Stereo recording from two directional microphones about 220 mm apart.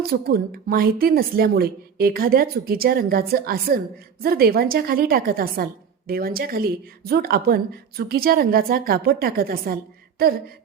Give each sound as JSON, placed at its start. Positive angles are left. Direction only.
{"t": 0.1, "sound": "a woman's voice", "side_deg": -45}